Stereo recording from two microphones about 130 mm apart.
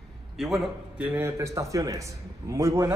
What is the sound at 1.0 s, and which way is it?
Speech, 15° right (ahead or behind).